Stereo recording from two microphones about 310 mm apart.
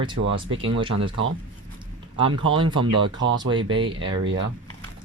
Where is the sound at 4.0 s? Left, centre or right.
Right.